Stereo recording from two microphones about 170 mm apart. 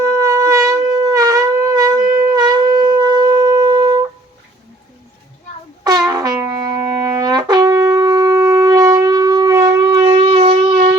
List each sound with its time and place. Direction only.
0.2 s shofar: 20° right (ahead or behind)
6.1 s brass instrument: 20° right (ahead or behind)
7.0 s shofar: 20° right (ahead or behind)
10.2 s shofar: 35° right (ahead or behind)